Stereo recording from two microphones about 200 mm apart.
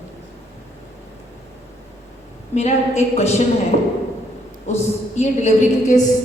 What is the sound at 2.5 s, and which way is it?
Speech, 35° left (ahead or behind).